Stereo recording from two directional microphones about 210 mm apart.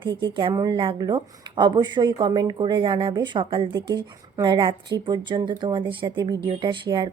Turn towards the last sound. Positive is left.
turn(degrees=-20)  # may be behind; listen again after turning